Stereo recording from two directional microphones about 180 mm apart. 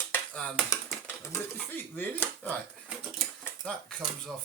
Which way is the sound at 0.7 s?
15° left (ahead or behind).